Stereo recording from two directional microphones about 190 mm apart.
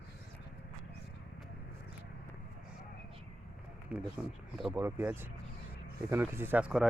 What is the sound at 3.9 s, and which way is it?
Speech, 5° right (ahead or behind).